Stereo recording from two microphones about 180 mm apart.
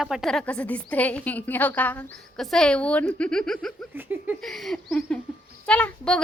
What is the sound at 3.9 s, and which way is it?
Speech, 10° right (ahead or behind).